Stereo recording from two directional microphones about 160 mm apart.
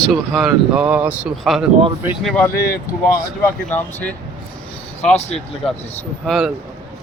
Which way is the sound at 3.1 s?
25° left (ahead or behind).